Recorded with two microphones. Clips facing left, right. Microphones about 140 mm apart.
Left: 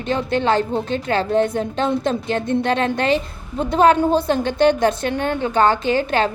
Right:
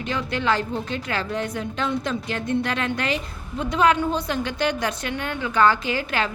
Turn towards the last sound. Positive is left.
turn(degrees=30)  # may be behind; listen again after turning